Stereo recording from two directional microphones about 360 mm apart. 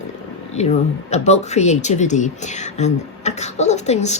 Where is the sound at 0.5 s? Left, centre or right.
Centre.